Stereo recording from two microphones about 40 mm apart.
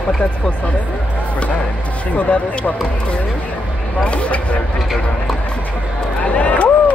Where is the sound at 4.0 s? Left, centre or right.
Left.